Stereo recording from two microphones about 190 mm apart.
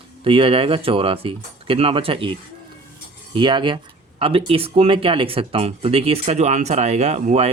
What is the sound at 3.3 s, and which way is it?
Speech, 25° right (ahead or behind).